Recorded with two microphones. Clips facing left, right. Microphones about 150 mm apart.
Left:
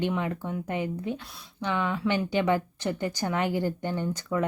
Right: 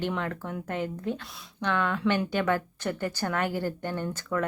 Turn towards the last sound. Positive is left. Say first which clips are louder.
# left 2 dB
turn(degrees=15)  # may be behind; listen again after turning